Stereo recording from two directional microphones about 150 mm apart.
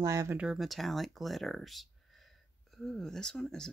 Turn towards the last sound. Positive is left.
turn(degrees=5)  # may be behind; listen again after turning